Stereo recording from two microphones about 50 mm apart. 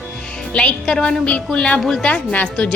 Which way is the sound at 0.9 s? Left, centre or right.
Centre.